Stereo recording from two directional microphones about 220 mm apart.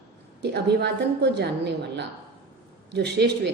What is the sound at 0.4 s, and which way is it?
A woman's voice, 50° right (ahead or behind).